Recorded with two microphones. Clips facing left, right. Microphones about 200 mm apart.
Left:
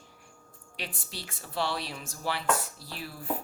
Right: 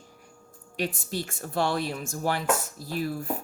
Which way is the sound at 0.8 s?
45° right (ahead or behind).